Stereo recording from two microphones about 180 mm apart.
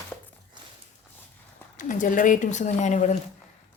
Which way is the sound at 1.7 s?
45° left (ahead or behind).